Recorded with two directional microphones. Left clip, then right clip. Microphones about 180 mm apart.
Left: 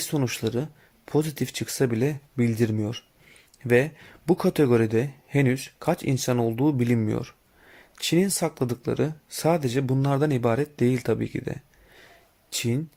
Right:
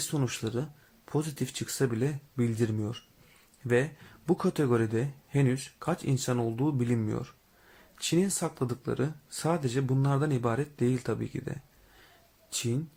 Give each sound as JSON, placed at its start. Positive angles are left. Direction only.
{"t": 0.0, "sound": "speech", "side_deg": 35}